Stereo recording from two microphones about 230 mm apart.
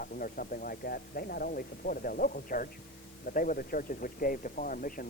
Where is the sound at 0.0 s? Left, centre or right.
Left.